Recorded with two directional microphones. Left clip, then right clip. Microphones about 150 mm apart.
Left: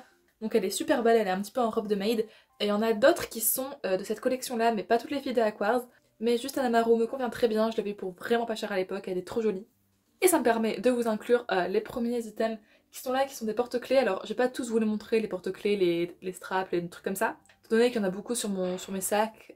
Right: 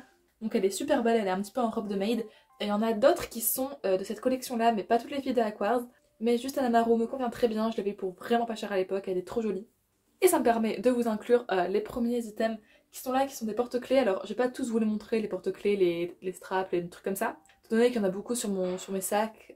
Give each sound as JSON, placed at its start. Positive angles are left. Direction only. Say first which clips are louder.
{"t": 0.4, "sound": "a woman's voice", "louder": "left 1 dB", "side_deg": 35}